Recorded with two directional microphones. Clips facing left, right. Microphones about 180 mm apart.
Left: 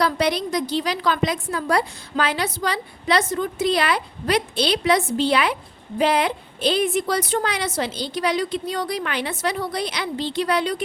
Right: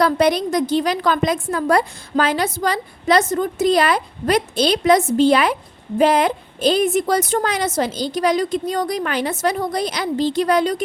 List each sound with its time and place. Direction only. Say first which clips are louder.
0.0 s a woman's voice: right 5 dB; 50° right (ahead or behind)